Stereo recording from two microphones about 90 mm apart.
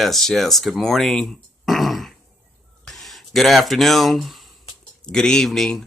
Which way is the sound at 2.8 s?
Centre (ahead or behind).